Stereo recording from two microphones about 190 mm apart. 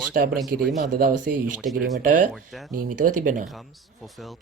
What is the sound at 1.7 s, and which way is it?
Speech, centre (ahead or behind).